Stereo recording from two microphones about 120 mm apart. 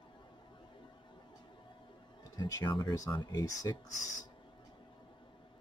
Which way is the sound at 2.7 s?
30° left (ahead or behind).